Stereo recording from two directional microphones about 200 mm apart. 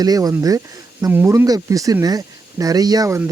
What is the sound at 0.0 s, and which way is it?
Speech, 20° right (ahead or behind).